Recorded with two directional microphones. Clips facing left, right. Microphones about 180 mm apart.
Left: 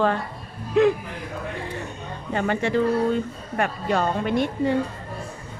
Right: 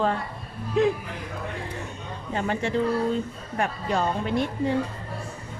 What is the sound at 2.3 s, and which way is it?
Speech, 65° left (ahead or behind).